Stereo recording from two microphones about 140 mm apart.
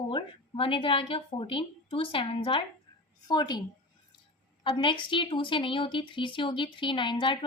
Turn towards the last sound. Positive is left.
turn(degrees=35)  # may be behind; listen again after turning